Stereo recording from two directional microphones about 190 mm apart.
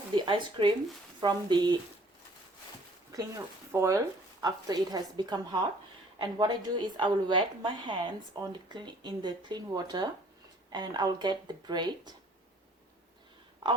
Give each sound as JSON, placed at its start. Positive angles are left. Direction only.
{"t": 0.1, "sound": "a woman's voice", "side_deg": -25}
{"t": 3.1, "sound": "a woman's voice", "side_deg": -15}
{"t": 13.6, "sound": "speech", "side_deg": -25}